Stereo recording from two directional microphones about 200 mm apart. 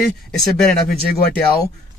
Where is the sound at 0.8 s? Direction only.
50° left (ahead or behind).